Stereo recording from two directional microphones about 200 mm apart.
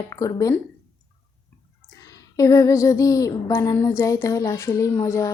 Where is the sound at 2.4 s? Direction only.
15° left (ahead or behind).